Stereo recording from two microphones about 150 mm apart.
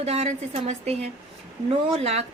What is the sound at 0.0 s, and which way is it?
Speech, 45° right (ahead or behind).